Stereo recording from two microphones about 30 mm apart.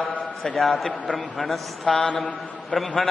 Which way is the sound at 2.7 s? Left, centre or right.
Left.